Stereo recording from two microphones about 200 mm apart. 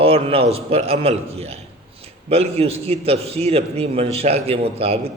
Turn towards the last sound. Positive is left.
turn(degrees=-30)  # may be behind; listen again after turning